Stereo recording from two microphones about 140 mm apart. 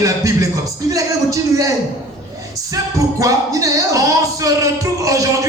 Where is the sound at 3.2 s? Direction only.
25° right (ahead or behind).